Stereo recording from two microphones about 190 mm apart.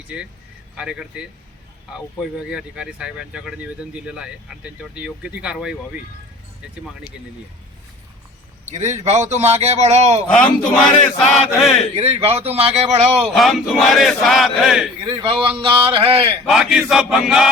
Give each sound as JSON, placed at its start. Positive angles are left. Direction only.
{"t": 0.1, "sound": "speech", "side_deg": -5}
{"t": 2.5, "sound": "speech", "side_deg": -5}
{"t": 8.6, "sound": "a man's voice", "side_deg": -35}
{"t": 10.3, "sound": "speech", "side_deg": 5}
{"t": 11.9, "sound": "a man's voice", "side_deg": -30}
{"t": 13.3, "sound": "speech", "side_deg": 0}
{"t": 15.0, "sound": "speech", "side_deg": -25}
{"t": 16.5, "sound": "speech", "side_deg": 0}